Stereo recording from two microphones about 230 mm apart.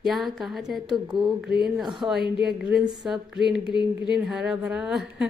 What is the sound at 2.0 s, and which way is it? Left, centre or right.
Speech, centre.